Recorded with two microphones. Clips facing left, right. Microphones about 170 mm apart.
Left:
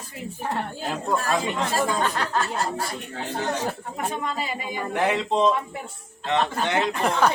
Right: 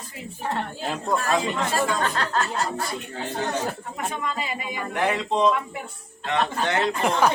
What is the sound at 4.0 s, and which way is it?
Speech, 35° left (ahead or behind).